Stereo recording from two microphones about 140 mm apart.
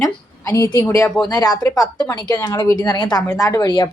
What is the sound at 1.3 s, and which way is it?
Speech, 25° left (ahead or behind).